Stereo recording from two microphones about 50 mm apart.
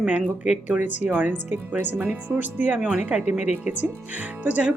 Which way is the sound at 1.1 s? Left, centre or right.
Right.